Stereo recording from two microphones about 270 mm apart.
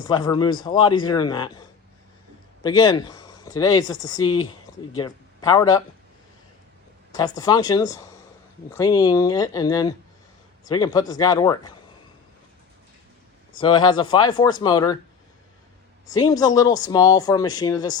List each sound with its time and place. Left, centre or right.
0.0 s speech: centre
2.6 s speech: centre
7.1 s speech: centre
13.6 s speech: centre
16.1 s speech: centre